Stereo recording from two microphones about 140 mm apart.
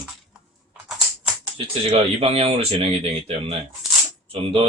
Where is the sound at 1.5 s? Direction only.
45° right (ahead or behind).